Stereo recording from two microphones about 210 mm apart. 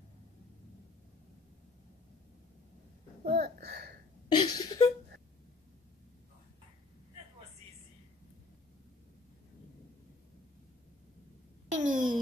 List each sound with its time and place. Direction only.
3.3 s speech: 45° right (ahead or behind)
4.3 s a sound: 20° left (ahead or behind)
11.7 s a child's voice: 40° right (ahead or behind)